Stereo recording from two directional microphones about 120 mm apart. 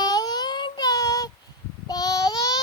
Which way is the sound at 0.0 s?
35° left (ahead or behind).